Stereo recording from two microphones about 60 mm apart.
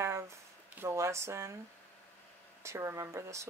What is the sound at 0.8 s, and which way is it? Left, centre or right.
Speech, right.